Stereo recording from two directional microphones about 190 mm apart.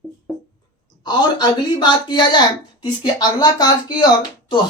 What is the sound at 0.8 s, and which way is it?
Speech, 20° left (ahead or behind).